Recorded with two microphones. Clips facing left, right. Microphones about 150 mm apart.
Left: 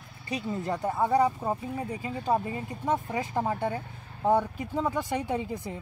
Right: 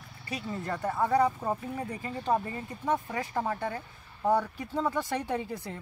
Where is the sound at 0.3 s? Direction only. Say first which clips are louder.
Left 4 dB; 20° left (ahead or behind).